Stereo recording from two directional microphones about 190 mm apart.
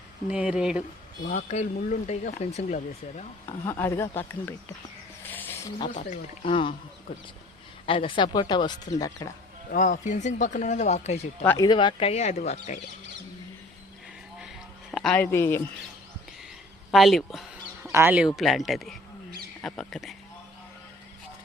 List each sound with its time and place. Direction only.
0.3 s speech: 5° right (ahead or behind)
1.3 s speech: 40° left (ahead or behind)
3.7 s speech: 15° left (ahead or behind)
5.3 s snake: 10° left (ahead or behind)
5.9 s speech: 35° left (ahead or behind)
7.9 s speech: 25° left (ahead or behind)
9.7 s speech: 40° left (ahead or behind)
11.4 s speech: 20° left (ahead or behind); by 12.8 s 40° left (ahead or behind)
14.9 s speech: 5° left (ahead or behind)
16.9 s speech: centre (ahead or behind)
17.8 s speech: 15° right (ahead or behind)